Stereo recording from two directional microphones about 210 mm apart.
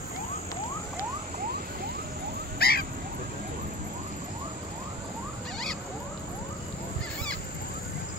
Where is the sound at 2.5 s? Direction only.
45° left (ahead or behind).